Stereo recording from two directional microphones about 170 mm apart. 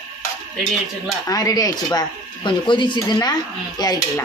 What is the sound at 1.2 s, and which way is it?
Speech, 20° left (ahead or behind).